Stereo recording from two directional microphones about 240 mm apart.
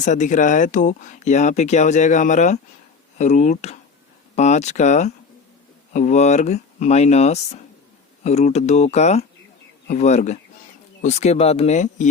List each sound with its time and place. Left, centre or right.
0.0 s speech: left